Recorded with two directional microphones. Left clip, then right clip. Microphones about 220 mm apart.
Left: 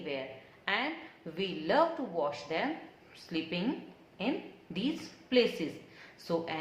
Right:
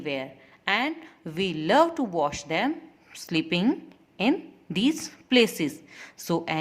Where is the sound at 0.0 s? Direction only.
45° right (ahead or behind).